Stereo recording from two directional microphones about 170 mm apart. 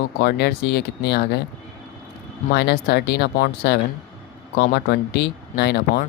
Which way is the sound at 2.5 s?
70° left (ahead or behind).